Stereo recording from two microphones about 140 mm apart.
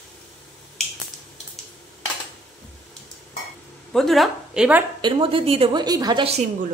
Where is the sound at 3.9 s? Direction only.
Centre (ahead or behind).